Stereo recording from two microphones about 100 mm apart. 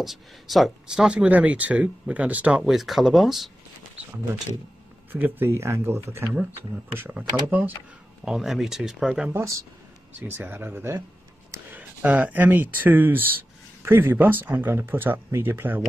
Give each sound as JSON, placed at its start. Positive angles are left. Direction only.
{"t": 0.0, "sound": "speech", "side_deg": 0}
{"t": 2.6, "sound": "speech", "side_deg": 0}
{"t": 5.1, "sound": "speech", "side_deg": -20}
{"t": 8.3, "sound": "speech", "side_deg": 0}
{"t": 9.3, "sound": "speech", "side_deg": -30}